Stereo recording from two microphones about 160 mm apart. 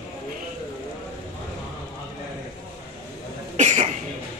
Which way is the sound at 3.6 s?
45° right (ahead or behind).